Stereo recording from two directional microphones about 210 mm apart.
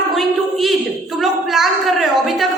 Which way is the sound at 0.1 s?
Centre (ahead or behind).